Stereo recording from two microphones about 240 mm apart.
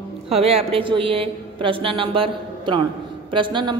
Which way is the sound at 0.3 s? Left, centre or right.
Right.